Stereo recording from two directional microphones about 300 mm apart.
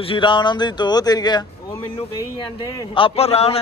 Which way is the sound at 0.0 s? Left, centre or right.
Centre.